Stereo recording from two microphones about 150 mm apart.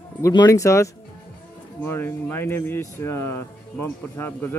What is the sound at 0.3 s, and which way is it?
Speech, 25° left (ahead or behind).